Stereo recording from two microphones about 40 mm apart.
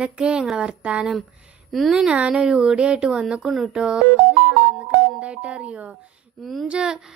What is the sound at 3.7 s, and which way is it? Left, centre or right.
Speech, right.